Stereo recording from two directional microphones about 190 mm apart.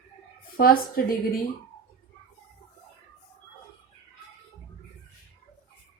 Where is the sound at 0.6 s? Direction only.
50° left (ahead or behind).